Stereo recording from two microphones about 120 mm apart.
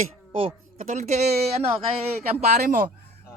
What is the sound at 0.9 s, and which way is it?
Speech, 75° right (ahead or behind).